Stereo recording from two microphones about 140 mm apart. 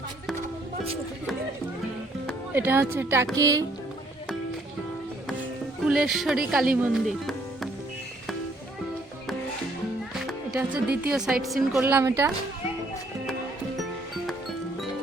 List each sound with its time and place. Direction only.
2.5 s a woman's voice: 15° right (ahead or behind)
5.4 s music: 5° right (ahead or behind)
6.5 s speech: 5° right (ahead or behind)
10.6 s a woman's voice: 10° right (ahead or behind)
11.8 s a woman's voice: 15° right (ahead or behind)